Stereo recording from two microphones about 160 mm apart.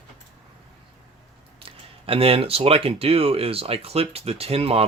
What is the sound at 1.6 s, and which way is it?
Speech, 35° right (ahead or behind).